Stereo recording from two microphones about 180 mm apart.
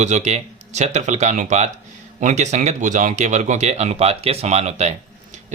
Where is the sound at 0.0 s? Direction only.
40° right (ahead or behind).